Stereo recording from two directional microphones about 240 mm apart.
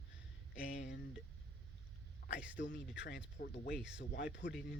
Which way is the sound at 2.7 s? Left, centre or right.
Left.